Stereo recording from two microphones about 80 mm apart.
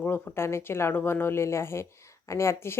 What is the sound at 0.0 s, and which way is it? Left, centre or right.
Speech, left.